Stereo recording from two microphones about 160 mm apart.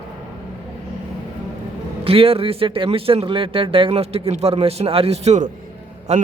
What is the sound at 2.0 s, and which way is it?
A man's voice, 35° right (ahead or behind).